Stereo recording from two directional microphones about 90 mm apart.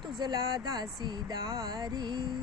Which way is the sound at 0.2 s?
45° right (ahead or behind).